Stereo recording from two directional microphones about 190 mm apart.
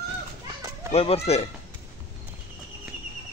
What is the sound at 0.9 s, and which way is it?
Speech, 30° left (ahead or behind).